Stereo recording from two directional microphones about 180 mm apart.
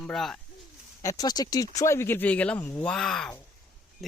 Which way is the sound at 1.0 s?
20° left (ahead or behind).